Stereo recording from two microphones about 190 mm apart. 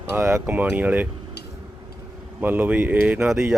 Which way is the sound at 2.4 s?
10° right (ahead or behind).